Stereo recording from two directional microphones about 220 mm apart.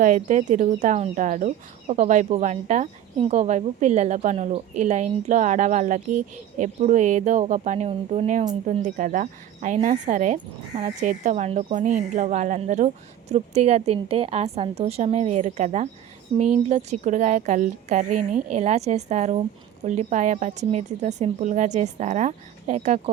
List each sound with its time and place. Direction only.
0.0 s speech: 35° right (ahead or behind)